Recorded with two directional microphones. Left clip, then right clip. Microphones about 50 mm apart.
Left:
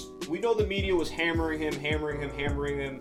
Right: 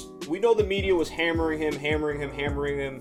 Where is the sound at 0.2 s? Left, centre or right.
Centre.